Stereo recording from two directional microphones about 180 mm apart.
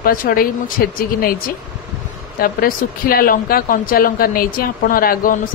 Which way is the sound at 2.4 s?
55° left (ahead or behind).